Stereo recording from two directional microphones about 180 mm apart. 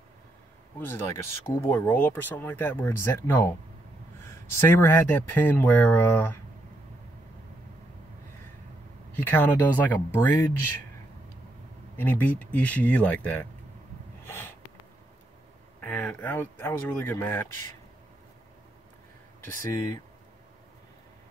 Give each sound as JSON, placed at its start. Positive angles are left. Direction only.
{"t": 0.7, "sound": "speech", "side_deg": 15}
{"t": 9.1, "sound": "speech", "side_deg": 10}
{"t": 12.0, "sound": "speech", "side_deg": 10}
{"t": 14.2, "sound": "snort", "side_deg": 10}
{"t": 15.8, "sound": "speech", "side_deg": 10}
{"t": 19.4, "sound": "speech", "side_deg": 15}